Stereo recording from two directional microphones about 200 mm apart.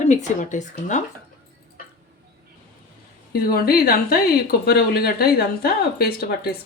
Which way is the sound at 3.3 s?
50° left (ahead or behind).